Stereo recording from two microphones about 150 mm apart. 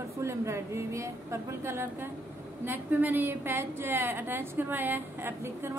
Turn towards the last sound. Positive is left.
turn(degrees=-15)  # may be behind; listen again after turning